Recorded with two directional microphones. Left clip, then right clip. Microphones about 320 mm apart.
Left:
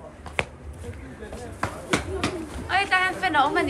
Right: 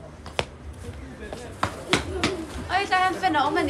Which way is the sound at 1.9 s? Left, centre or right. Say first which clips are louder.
Right 1 dB; centre.